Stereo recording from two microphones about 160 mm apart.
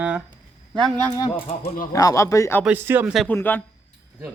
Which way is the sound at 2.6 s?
10° right (ahead or behind).